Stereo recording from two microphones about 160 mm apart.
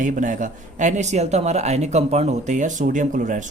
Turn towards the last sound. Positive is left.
turn(degrees=-55)  # may be behind; listen again after turning